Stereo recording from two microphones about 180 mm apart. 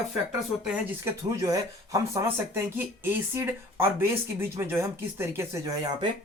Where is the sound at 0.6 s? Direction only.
5° right (ahead or behind).